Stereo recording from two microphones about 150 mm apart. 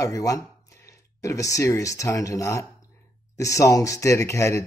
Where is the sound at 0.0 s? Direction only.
20° left (ahead or behind).